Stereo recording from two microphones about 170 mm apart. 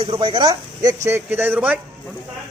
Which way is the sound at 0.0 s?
30° right (ahead or behind).